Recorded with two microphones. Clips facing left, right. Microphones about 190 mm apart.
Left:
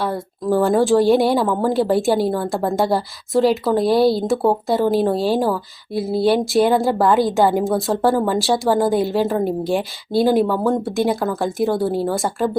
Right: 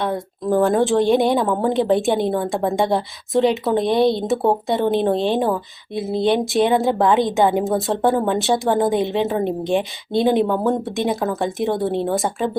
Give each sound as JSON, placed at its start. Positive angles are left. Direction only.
{"t": 0.0, "sound": "speech", "side_deg": 5}